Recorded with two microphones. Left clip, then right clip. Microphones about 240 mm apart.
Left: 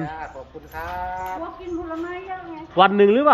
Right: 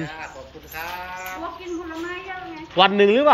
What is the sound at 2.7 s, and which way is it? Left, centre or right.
Speech, centre.